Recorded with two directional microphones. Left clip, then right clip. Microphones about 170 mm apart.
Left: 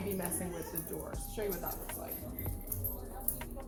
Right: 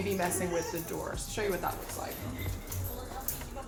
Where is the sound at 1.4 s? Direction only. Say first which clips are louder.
Right 5 dB; 15° right (ahead or behind).